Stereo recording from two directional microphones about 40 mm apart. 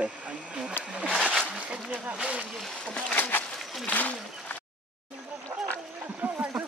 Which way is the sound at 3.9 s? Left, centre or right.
Left.